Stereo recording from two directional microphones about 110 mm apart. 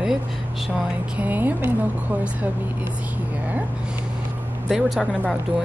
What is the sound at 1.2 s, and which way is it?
Speech, 15° right (ahead or behind).